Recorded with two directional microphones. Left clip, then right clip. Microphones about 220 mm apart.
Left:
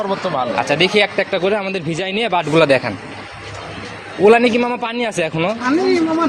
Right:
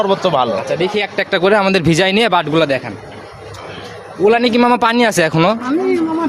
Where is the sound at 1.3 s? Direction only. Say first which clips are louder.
Right 6 dB; 40° right (ahead or behind).